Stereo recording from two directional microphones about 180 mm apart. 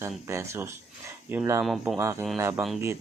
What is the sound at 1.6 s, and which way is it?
Speech, centre (ahead or behind).